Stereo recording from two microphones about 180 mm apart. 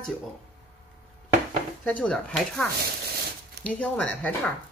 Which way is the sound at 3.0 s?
60° right (ahead or behind).